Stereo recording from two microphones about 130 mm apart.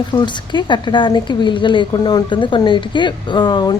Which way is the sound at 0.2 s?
35° left (ahead or behind).